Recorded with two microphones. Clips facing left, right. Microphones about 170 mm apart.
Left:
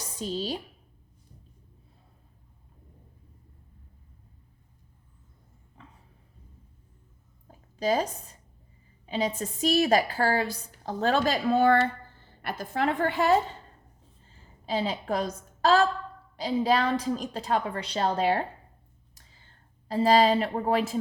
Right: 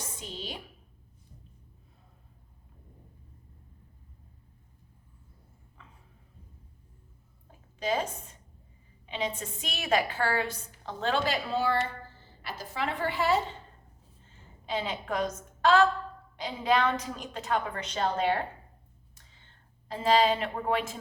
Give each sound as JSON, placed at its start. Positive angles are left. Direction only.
{"t": 0.2, "sound": "a woman's voice", "side_deg": 35}
{"t": 5.8, "sound": "a sound", "side_deg": 35}
{"t": 7.4, "sound": "a sound", "side_deg": 40}
{"t": 9.0, "sound": "a woman's voice", "side_deg": 40}
{"t": 14.3, "sound": "a woman's voice", "side_deg": 35}
{"t": 19.9, "sound": "a woman's voice", "side_deg": 35}